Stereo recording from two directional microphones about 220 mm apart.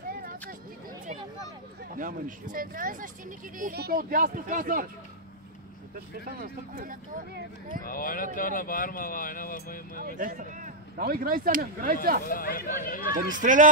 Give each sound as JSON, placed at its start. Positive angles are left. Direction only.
{"t": 0.1, "sound": "a sound", "side_deg": -40}
{"t": 1.8, "sound": "speech", "side_deg": -40}
{"t": 5.9, "sound": "speech", "side_deg": -40}
{"t": 7.8, "sound": "speech", "side_deg": 40}
{"t": 10.0, "sound": "speech", "side_deg": -35}
{"t": 12.3, "sound": "speech", "side_deg": 40}
{"t": 13.3, "sound": "speech", "side_deg": -35}